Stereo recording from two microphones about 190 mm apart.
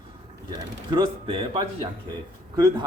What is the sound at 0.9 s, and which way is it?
A man's voice, 25° right (ahead or behind).